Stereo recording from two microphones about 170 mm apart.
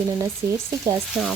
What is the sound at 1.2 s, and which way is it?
Frying, 5° right (ahead or behind).